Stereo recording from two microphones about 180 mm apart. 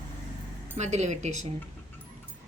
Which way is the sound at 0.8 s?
40° right (ahead or behind).